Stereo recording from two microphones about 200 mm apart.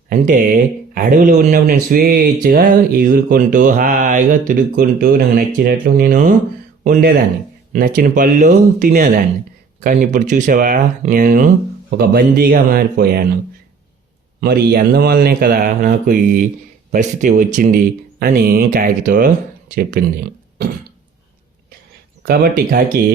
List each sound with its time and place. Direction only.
0.1 s speech: 40° right (ahead or behind)
14.4 s speech: 50° right (ahead or behind)
22.2 s speech: 45° right (ahead or behind)